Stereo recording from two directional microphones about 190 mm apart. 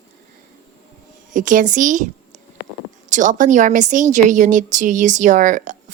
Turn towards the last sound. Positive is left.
turn(degrees=-40)  # may be behind; listen again after turning